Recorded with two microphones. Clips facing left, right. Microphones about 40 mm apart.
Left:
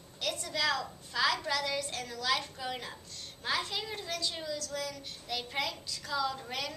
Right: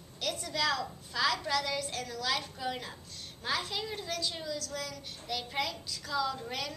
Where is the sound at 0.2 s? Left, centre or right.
Centre.